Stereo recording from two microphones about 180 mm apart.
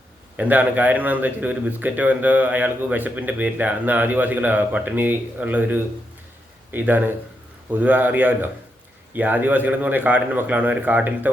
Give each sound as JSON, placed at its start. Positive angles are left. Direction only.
{"t": 0.3, "sound": "speech", "side_deg": -10}